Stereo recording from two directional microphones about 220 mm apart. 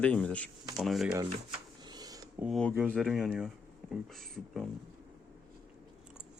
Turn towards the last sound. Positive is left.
turn(degrees=0)  # may be behind; listen again after turning